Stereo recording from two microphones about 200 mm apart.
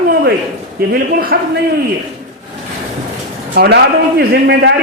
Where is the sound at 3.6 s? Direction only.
55° right (ahead or behind).